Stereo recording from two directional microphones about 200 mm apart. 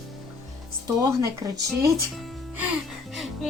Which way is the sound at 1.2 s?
15° right (ahead or behind).